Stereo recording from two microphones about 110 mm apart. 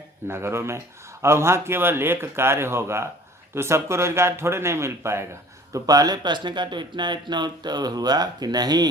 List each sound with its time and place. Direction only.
0.3 s a man's voice: 20° right (ahead or behind); by 8.9 s 35° right (ahead or behind)